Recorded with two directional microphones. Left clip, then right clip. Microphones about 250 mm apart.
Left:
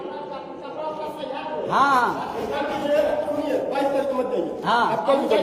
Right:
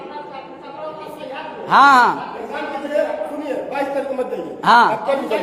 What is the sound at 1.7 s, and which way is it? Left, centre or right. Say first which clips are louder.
Speech: right 8 dB; right.